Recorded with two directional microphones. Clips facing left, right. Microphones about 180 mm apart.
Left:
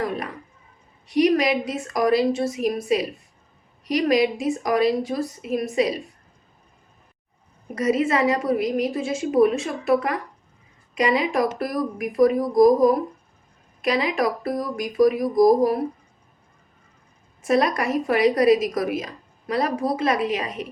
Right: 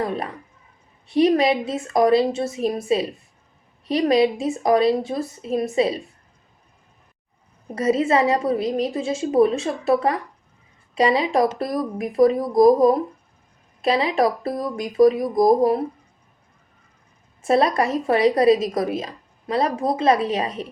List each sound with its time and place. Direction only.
0.0 s speech: 20° right (ahead or behind)
7.8 s speech: 25° right (ahead or behind)
10.9 s speech: 25° right (ahead or behind)
17.4 s a woman's voice: 25° right (ahead or behind)